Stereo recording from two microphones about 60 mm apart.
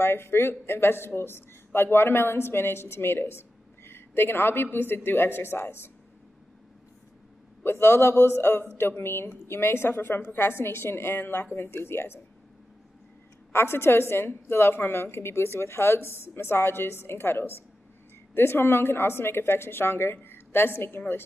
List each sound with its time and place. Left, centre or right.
0.0 s a woman's voice: left
7.6 s a man's voice: left
13.5 s a woman's voice: left